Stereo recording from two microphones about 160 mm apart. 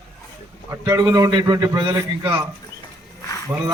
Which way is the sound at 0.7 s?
25° right (ahead or behind).